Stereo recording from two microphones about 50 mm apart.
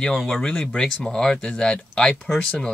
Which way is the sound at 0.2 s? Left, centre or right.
Centre.